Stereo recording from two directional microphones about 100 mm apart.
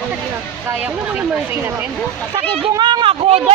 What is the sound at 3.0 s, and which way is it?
Speech, 70° right (ahead or behind).